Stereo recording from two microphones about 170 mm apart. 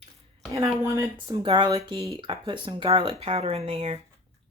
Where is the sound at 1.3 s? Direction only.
30° right (ahead or behind).